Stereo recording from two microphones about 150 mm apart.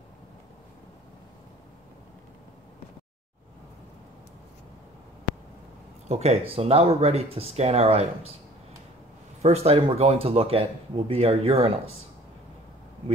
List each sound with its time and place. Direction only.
6.0 s speech: 45° right (ahead or behind)
9.4 s speech: 45° right (ahead or behind)